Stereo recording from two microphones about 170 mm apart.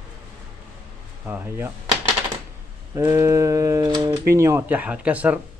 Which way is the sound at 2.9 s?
15° right (ahead or behind).